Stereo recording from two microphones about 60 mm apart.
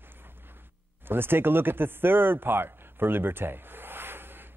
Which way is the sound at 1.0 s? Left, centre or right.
Right.